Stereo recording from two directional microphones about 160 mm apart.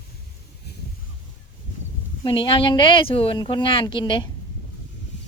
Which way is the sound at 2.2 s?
30° left (ahead or behind).